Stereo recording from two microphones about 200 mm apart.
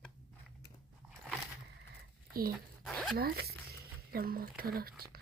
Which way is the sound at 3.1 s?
50° right (ahead or behind).